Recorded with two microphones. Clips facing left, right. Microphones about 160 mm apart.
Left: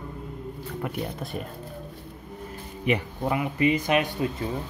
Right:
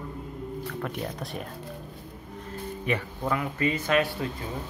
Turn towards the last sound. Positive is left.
turn(degrees=15)  # may be behind; listen again after turning